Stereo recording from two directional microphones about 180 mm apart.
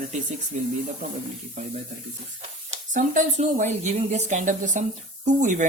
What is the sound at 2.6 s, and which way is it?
Speech, 45° right (ahead or behind).